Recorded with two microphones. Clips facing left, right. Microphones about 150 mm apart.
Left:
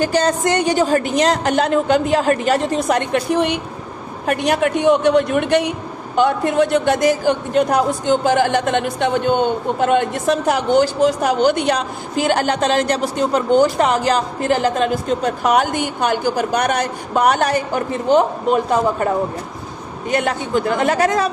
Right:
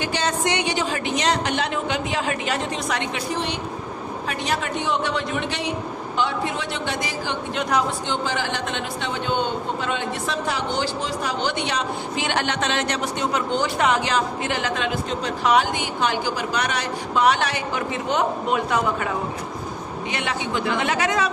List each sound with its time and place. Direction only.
0.0 s a man's voice: 40° left (ahead or behind)